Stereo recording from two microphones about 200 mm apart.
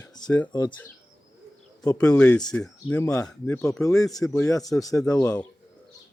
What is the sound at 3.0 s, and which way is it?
Speech, 15° left (ahead or behind).